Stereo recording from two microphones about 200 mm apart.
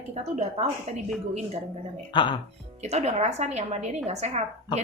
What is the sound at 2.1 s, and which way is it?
Speech, 25° left (ahead or behind).